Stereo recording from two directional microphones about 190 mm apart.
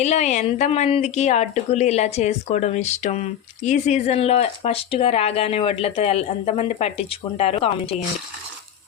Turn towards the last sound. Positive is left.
turn(degrees=30)  # may be behind; listen again after turning